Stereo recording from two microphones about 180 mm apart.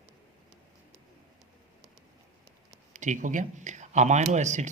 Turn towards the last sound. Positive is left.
turn(degrees=-40)  # may be behind; listen again after turning